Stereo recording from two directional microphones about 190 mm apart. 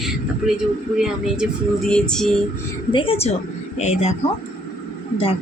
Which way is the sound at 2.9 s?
30° left (ahead or behind).